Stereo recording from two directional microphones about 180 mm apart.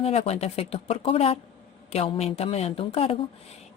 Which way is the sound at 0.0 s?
35° left (ahead or behind).